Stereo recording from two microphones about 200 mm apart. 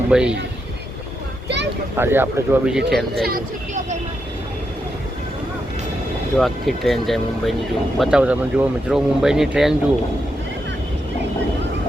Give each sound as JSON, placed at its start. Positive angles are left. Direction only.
{"t": 0.1, "sound": "speech", "side_deg": -5}
{"t": 2.0, "sound": "speech", "side_deg": -10}
{"t": 3.2, "sound": "speech", "side_deg": -45}
{"t": 6.3, "sound": "speech", "side_deg": 0}